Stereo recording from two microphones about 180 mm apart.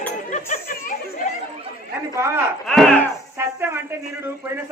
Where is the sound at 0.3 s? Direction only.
45° left (ahead or behind).